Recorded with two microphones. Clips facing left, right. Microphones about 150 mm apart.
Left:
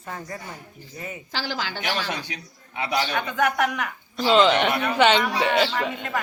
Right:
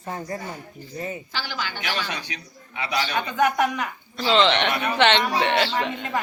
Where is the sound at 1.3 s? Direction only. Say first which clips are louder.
Left 2 dB; 90° left.